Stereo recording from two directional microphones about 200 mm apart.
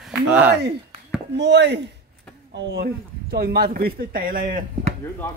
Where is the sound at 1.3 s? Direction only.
60° right (ahead or behind); by 4.9 s 45° right (ahead or behind).